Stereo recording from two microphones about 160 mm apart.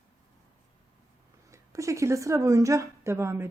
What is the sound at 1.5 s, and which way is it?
A woman's voice, 20° right (ahead or behind).